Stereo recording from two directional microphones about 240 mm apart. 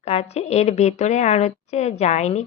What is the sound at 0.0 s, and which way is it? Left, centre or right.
A woman's voice, left.